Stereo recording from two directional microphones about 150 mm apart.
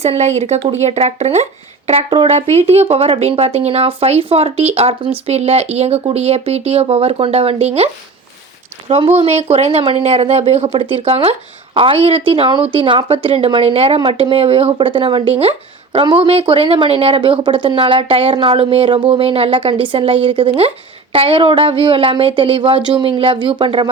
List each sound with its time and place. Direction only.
0.0 s speech: 45° right (ahead or behind)
8.9 s speech: 45° right (ahead or behind)